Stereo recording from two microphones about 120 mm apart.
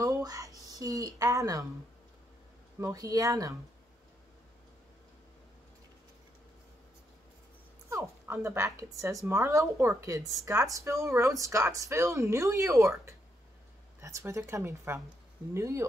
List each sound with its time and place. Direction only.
0.0 s a sound: 30° right (ahead or behind)
0.6 s speech: 30° right (ahead or behind)
2.8 s speech: 30° right (ahead or behind)
7.9 s speech: 25° right (ahead or behind)